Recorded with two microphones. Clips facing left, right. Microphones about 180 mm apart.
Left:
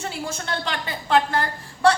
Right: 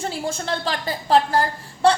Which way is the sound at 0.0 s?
30° right (ahead or behind).